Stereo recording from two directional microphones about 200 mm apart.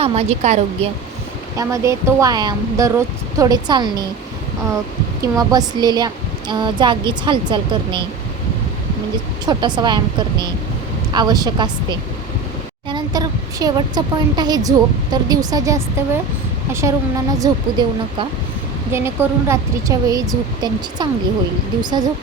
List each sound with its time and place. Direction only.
0.0 s speech: 30° right (ahead or behind)
1.5 s speech: 15° right (ahead or behind)
5.2 s speech: 20° right (ahead or behind)
9.5 s speech: 20° right (ahead or behind)
17.4 s speech: 20° right (ahead or behind)